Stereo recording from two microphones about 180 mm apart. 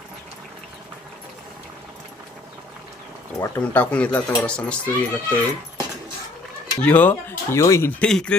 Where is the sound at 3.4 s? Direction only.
10° left (ahead or behind).